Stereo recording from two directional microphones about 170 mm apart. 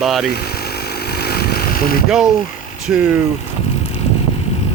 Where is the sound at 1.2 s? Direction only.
65° left (ahead or behind).